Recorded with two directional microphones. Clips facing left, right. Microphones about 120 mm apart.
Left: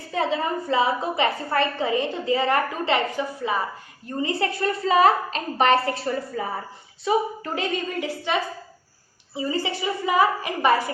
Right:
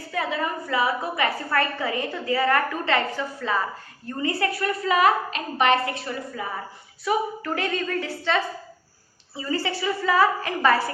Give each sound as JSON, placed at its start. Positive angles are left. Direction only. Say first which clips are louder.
{"t": 0.1, "sound": "a woman's voice", "louder": "left 3 dB", "side_deg": 25}
{"t": 7.0, "sound": "a woman's voice", "louder": "left 2 dB", "side_deg": 25}